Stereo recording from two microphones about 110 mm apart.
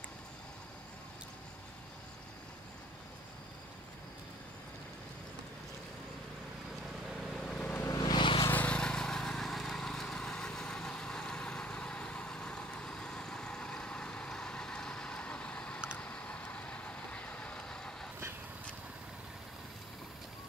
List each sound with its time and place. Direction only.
7.1 s vehicle: 5° left (ahead or behind)
7.7 s vehicle: 20° left (ahead or behind)
8.0 s vehicle: 45° left (ahead or behind)
8.5 s vehicle: 15° left (ahead or behind)